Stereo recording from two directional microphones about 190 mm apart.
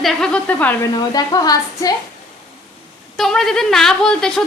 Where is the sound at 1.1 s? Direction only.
20° left (ahead or behind).